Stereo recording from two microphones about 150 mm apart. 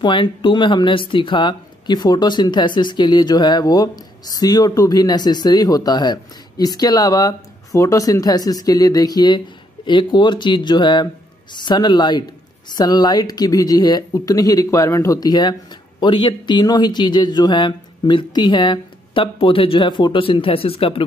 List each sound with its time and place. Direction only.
0.0 s speech: 30° left (ahead or behind)